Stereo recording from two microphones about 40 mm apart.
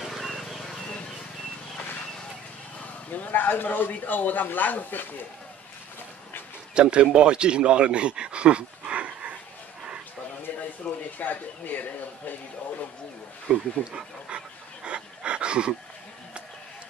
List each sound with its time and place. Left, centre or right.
0.0 s a sound: centre
0.3 s a sound: centre
3.1 s a man's voice: left
6.7 s speech: right
10.8 s speech: left
11.1 s speech: left
13.5 s speech: right
14.9 s dog: right